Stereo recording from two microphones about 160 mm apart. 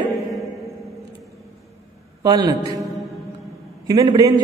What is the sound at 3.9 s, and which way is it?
Speech, 25° right (ahead or behind).